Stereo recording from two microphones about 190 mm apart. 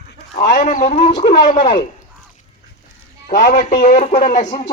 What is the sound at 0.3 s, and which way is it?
Speech, 45° left (ahead or behind).